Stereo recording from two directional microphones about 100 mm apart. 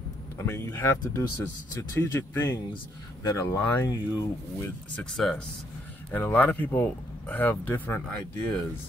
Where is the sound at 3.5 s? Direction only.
20° left (ahead or behind).